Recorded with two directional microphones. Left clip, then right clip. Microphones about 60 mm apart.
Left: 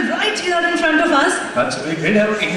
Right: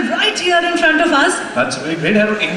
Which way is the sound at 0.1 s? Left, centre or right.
Right.